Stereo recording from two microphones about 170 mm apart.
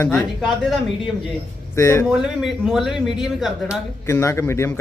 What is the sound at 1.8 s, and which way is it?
Speech, 15° left (ahead or behind).